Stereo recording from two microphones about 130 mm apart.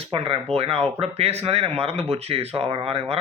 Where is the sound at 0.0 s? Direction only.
45° right (ahead or behind).